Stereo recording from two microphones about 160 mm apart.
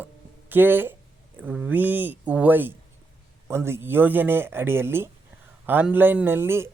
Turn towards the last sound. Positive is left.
turn(degrees=-15)  # may be behind; listen again after turning